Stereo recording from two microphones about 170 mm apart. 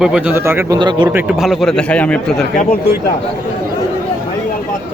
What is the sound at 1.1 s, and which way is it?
A man's voice, 5° right (ahead or behind).